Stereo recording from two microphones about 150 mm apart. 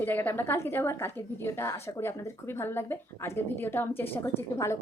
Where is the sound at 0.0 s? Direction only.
10° left (ahead or behind).